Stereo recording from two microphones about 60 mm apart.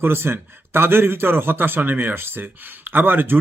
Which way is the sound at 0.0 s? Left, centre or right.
Right.